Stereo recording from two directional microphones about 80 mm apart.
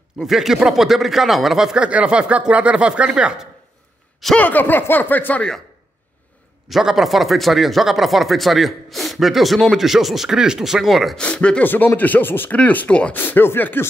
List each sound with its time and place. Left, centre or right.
0.2 s speech: centre
4.4 s speech: left
6.7 s speech: centre
11.1 s speech: centre
11.6 s speech: left